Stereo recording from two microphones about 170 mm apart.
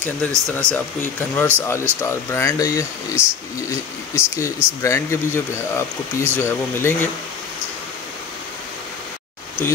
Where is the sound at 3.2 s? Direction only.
5° right (ahead or behind).